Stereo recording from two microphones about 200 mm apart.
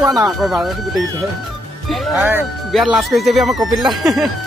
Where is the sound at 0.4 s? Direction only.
Centre (ahead or behind).